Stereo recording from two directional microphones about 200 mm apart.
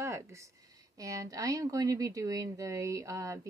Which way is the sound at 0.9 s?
15° right (ahead or behind).